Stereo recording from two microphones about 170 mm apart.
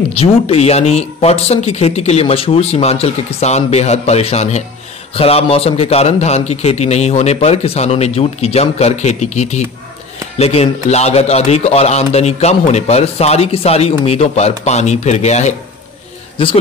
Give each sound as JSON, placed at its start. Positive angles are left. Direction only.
{"t": 0.2, "sound": "a man's voice", "side_deg": 35}
{"t": 16.4, "sound": "a man's voice", "side_deg": 30}